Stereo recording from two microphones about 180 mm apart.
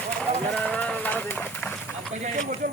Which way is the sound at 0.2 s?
5° left (ahead or behind).